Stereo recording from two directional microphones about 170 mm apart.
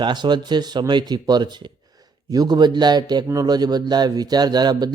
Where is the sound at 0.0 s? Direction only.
25° right (ahead or behind).